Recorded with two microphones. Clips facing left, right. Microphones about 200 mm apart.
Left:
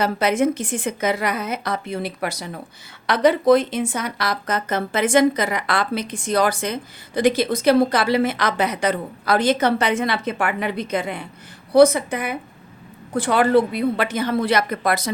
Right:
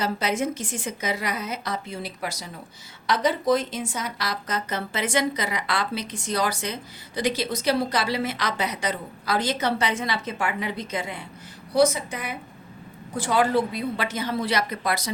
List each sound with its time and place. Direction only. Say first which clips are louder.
0.0 s speech: left 6 dB; 60° left (ahead or behind)